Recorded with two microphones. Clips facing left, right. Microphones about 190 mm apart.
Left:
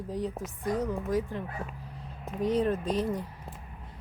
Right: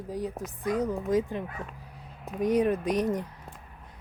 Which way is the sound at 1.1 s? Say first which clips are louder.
Right 3 dB; 15° right (ahead or behind).